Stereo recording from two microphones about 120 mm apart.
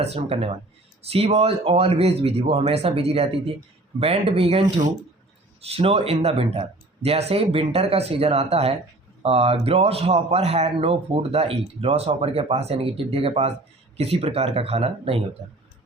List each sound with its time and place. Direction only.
0.3 s speech: 55° right (ahead or behind)
5.6 s speech: 55° right (ahead or behind)